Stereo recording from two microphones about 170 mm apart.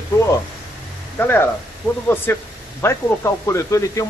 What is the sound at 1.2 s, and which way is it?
Speech, 10° left (ahead or behind).